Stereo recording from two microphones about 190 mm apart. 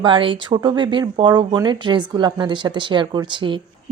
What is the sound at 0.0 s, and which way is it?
Speech, 25° right (ahead or behind).